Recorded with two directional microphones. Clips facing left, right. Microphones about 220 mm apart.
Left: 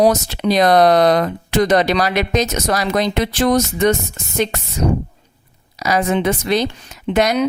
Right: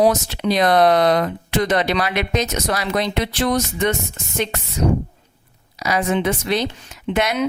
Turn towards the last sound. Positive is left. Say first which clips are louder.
# left 4 dB
turn(degrees=40)  # may be behind; listen again after turning